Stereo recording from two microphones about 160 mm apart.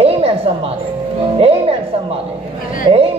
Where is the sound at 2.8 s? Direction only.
35° right (ahead or behind).